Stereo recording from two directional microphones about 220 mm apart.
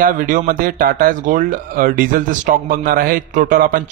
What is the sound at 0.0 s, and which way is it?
A man's voice, 40° right (ahead or behind).